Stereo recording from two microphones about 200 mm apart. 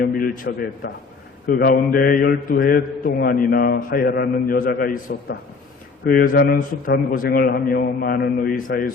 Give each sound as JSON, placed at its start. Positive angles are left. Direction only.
{"t": 0.5, "sound": "a man's voice", "side_deg": 55}